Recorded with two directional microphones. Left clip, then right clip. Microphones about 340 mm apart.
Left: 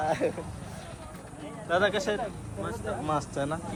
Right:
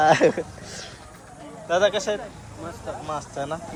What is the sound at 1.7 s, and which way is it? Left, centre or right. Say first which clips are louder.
A man's voice: right 5 dB; centre.